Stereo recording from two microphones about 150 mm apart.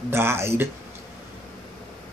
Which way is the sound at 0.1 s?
15° right (ahead or behind).